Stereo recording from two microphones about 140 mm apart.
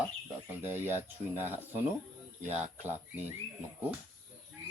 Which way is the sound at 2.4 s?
10° right (ahead or behind).